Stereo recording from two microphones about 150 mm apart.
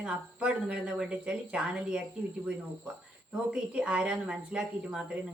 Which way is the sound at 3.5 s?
5° right (ahead or behind).